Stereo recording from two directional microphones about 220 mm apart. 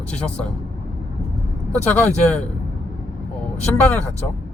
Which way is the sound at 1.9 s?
5° left (ahead or behind).